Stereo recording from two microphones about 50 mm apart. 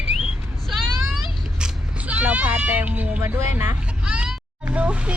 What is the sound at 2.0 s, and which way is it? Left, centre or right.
Speech, right.